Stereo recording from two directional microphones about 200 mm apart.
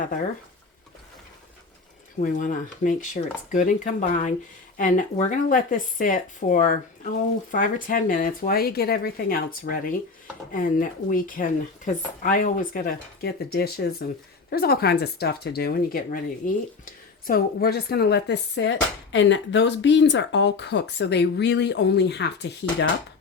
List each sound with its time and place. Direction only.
2.2 s a woman's voice: 40° left (ahead or behind); by 22.9 s 60° left (ahead or behind)